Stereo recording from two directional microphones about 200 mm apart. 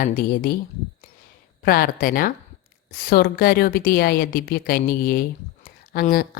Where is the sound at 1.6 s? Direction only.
50° left (ahead or behind).